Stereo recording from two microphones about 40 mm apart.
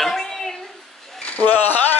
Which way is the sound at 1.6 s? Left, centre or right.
Left.